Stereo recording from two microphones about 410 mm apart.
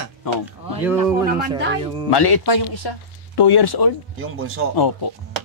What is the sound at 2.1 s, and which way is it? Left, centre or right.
Speech, left.